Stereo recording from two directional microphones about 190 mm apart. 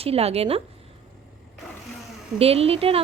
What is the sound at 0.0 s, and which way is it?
Speech, 30° right (ahead or behind).